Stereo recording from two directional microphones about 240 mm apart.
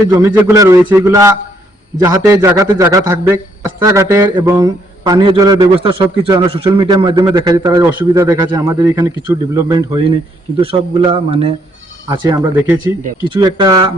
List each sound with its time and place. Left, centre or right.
0.1 s a man's voice: centre